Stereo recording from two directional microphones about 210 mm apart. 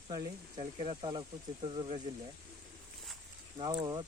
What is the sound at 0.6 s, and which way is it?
Speech, 30° right (ahead or behind).